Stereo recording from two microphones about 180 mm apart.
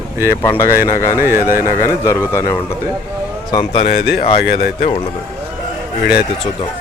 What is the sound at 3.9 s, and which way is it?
Speech, 65° left (ahead or behind).